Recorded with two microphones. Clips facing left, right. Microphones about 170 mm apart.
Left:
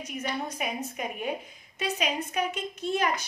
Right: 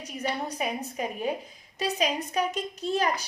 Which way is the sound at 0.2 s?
35° right (ahead or behind).